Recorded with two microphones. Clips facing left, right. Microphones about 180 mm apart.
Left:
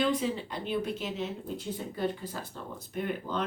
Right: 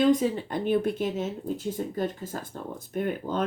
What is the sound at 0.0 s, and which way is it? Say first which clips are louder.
Speech: right 7 dB; 45° right (ahead or behind).